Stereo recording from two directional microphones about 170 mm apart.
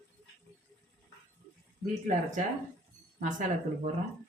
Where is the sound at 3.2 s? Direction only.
45° right (ahead or behind).